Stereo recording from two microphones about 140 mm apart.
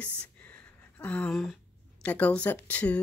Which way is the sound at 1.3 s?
Centre (ahead or behind).